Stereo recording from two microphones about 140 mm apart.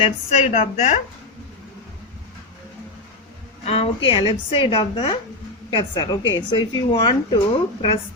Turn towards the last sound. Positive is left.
turn(degrees=35)  # may be behind; listen again after turning